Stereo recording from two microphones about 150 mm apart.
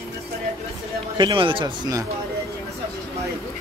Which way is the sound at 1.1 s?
35° right (ahead or behind).